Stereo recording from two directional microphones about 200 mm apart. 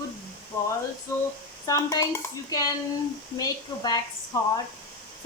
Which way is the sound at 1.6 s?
15° left (ahead or behind).